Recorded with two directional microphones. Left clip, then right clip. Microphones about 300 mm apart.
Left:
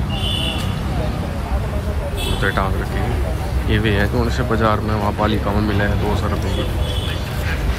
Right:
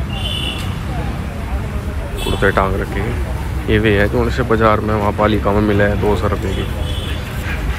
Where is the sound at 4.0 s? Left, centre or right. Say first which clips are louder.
Right 4 dB; centre.